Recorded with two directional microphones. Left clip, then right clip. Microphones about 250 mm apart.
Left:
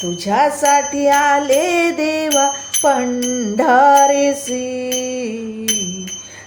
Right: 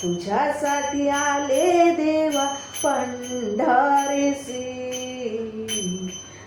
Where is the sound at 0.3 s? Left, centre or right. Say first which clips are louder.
Left 9 dB; left.